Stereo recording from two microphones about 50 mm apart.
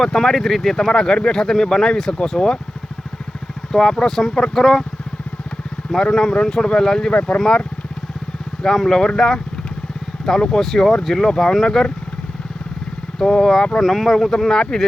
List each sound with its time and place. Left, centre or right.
0.0 s speech: centre
3.7 s speech: centre
5.9 s speech: centre
7.1 s speech: left
8.6 s speech: centre
13.1 s speech: centre